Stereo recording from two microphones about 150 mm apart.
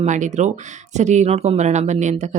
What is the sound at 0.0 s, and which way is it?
Speech, 55° right (ahead or behind).